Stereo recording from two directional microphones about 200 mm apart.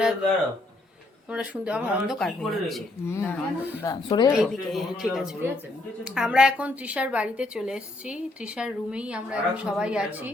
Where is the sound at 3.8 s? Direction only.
20° left (ahead or behind).